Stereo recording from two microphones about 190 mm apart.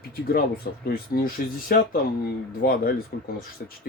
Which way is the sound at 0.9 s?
50° left (ahead or behind).